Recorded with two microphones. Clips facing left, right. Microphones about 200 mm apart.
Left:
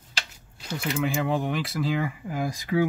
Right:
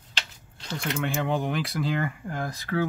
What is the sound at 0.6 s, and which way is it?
Speech, 5° left (ahead or behind).